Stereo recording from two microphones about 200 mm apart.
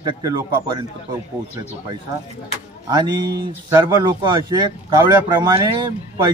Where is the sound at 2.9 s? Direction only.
20° right (ahead or behind).